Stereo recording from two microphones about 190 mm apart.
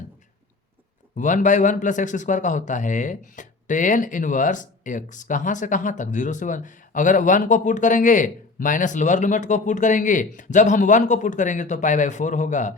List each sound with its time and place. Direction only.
1.1 s a man's voice: 40° left (ahead or behind)